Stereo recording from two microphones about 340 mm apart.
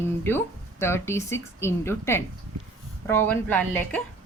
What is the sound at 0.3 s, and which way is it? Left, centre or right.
A woman's voice, centre.